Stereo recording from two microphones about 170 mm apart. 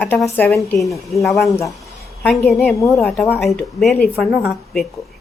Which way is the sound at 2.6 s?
Centre (ahead or behind).